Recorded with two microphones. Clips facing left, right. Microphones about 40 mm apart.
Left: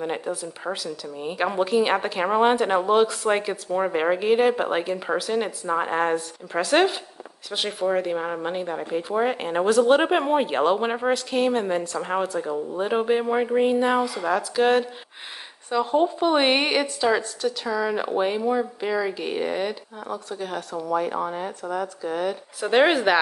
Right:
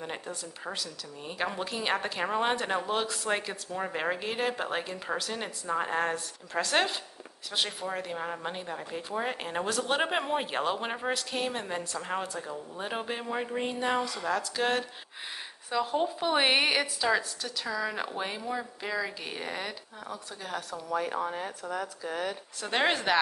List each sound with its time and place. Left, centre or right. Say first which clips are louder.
0.0 s a woman's voice: left 10 dB; centre